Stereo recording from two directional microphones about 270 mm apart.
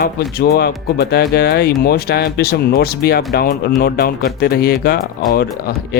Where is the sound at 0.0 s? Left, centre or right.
Left.